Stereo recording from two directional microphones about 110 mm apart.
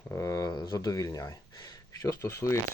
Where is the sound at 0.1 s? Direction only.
30° left (ahead or behind).